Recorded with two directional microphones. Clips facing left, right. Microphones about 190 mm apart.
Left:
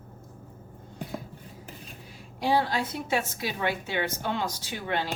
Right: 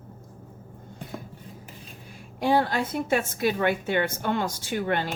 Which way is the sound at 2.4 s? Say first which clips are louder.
Right 3 dB; 55° right (ahead or behind).